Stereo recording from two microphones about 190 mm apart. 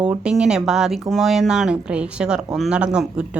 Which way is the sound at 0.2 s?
5° right (ahead or behind).